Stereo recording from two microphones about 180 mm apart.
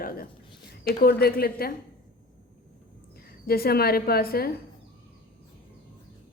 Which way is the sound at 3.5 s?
60° left (ahead or behind).